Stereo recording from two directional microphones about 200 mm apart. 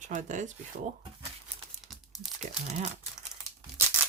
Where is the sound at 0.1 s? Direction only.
40° right (ahead or behind).